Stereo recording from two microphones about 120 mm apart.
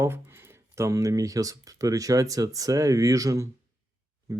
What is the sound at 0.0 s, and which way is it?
Speech, 20° right (ahead or behind).